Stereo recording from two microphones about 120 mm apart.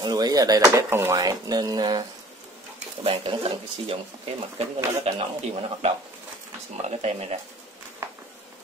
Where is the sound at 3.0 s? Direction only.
55° right (ahead or behind).